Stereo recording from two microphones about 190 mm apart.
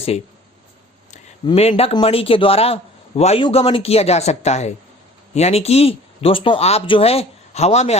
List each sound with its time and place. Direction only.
1.5 s a man's voice: 30° left (ahead or behind)